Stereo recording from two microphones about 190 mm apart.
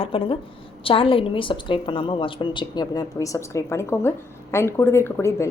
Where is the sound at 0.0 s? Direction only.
30° left (ahead or behind).